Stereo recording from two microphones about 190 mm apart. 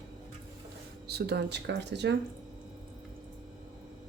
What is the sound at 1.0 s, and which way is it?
Speech, 60° right (ahead or behind).